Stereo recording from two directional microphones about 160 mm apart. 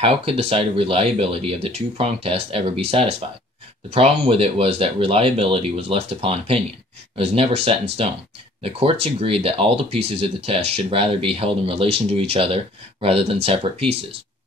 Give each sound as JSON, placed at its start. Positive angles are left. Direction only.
{"t": 0.0, "sound": "speech", "side_deg": -35}